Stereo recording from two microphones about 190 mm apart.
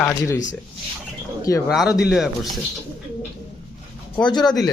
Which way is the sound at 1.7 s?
5° right (ahead or behind).